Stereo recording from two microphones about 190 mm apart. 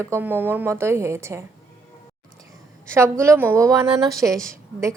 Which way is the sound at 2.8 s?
15° right (ahead or behind).